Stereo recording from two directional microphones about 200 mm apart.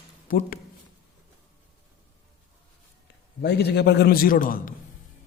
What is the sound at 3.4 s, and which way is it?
A man's voice, 55° left (ahead or behind).